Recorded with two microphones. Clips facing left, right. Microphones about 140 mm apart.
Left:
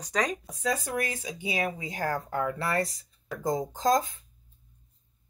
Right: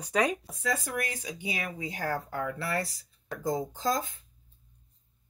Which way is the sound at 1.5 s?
40° left (ahead or behind).